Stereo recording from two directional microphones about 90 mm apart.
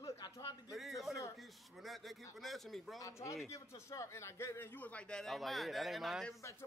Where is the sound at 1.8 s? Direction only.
Centre (ahead or behind).